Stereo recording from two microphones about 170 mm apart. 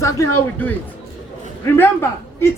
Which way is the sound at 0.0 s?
15° left (ahead or behind).